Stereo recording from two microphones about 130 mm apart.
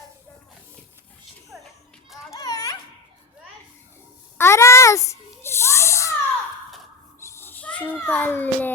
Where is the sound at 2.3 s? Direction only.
30° left (ahead or behind).